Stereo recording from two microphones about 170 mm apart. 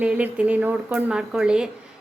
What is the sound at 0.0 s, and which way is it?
Speech, 5° right (ahead or behind).